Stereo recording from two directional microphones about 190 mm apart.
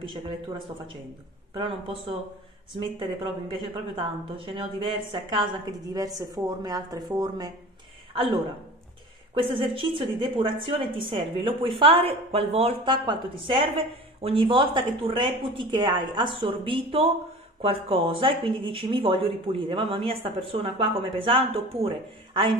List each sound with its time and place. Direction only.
1.5 s speech: 25° right (ahead or behind)
9.3 s speech: 25° right (ahead or behind)